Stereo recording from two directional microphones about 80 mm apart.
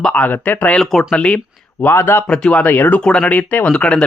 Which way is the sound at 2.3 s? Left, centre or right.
Centre.